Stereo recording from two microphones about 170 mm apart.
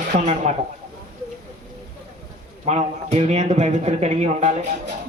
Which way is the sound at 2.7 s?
40° right (ahead or behind).